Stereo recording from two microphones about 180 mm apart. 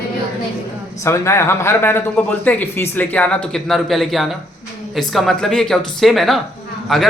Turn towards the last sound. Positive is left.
turn(degrees=0)  # may be behind; listen again after turning